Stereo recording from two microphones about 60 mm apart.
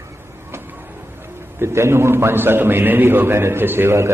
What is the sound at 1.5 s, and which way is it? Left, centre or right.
A man's voice, right.